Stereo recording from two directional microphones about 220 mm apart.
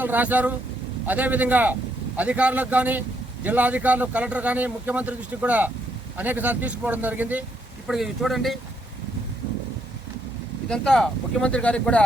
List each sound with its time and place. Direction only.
0.0 s speech: 10° right (ahead or behind)
10.7 s speech: centre (ahead or behind)